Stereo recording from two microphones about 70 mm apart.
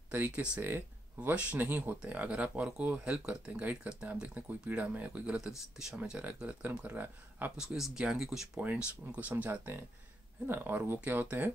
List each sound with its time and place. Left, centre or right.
0.6 s speech: right
1.3 s speech: centre
1.7 s speech: right
2.0 s speech: centre
5.5 s speech: centre
5.9 s speech: centre
7.6 s speech: centre
8.5 s speech: right